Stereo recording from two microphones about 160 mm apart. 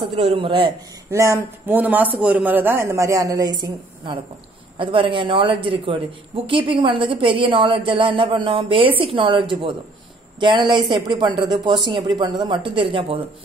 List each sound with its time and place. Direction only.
0.0 s speech: 35° right (ahead or behind)
1.1 s speech: 20° right (ahead or behind); by 13.2 s 35° right (ahead or behind)